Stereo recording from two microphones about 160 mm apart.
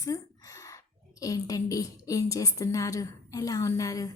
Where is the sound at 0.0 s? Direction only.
20° left (ahead or behind).